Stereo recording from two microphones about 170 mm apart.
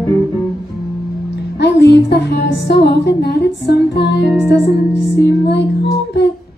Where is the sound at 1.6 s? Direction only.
80° left.